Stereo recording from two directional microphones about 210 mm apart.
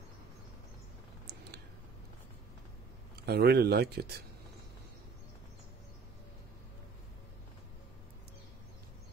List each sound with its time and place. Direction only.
3.3 s speech: 50° right (ahead or behind)